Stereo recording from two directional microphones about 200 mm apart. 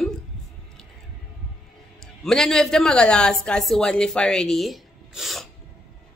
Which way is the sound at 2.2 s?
Centre (ahead or behind).